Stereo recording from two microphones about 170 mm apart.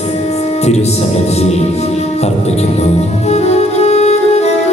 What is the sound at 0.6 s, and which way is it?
Music, 40° left (ahead or behind).